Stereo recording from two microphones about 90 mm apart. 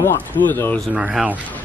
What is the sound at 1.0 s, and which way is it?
Speech, 10° right (ahead or behind).